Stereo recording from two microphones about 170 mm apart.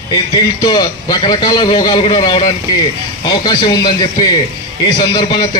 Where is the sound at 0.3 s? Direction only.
25° left (ahead or behind).